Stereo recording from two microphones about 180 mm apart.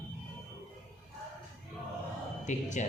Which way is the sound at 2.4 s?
40° left (ahead or behind).